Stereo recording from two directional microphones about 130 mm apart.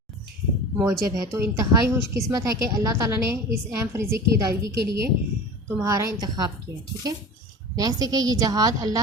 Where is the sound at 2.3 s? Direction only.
25° right (ahead or behind).